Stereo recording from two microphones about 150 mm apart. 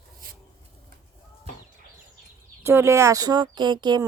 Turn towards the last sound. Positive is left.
turn(degrees=-30)  # may be behind; listen again after turning